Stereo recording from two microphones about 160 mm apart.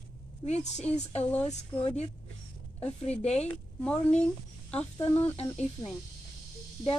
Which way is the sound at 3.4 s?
10° left (ahead or behind).